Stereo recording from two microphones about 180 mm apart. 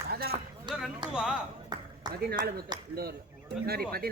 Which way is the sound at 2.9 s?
60° right (ahead or behind).